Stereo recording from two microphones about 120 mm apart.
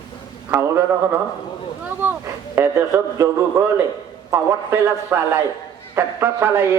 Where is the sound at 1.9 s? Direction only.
15° right (ahead or behind).